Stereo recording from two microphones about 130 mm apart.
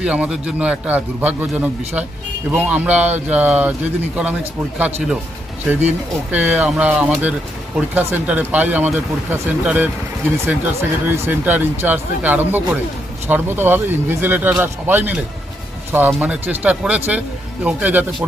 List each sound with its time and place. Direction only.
0.0 s speech: 10° right (ahead or behind)
6.3 s speech: 10° right (ahead or behind)